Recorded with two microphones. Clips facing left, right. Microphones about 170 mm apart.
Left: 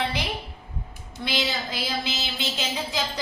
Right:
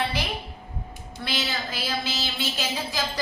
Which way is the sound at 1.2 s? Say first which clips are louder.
Left 2 dB; 15° left (ahead or behind).